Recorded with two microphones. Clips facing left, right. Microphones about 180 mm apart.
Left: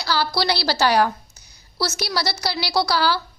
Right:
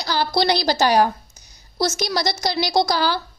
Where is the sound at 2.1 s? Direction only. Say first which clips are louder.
Right 2 dB; 20° right (ahead or behind).